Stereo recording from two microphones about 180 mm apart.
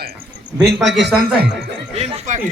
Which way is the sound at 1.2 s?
60° right (ahead or behind).